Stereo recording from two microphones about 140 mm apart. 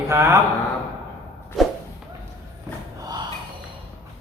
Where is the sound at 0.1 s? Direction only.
20° right (ahead or behind).